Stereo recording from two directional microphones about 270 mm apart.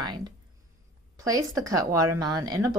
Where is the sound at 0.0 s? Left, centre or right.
Centre.